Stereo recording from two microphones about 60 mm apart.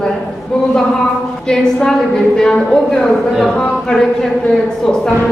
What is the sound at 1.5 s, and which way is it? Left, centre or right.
A woman's voice, centre.